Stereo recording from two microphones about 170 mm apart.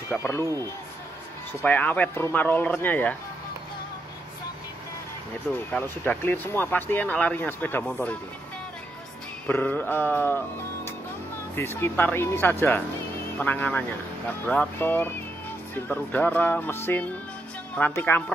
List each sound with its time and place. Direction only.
0.1 s speech: 15° left (ahead or behind)
1.6 s speech: 10° left (ahead or behind)
5.7 s speech: 10° left (ahead or behind)
9.5 s speech: 10° left (ahead or behind)
11.5 s speech: 15° left (ahead or behind)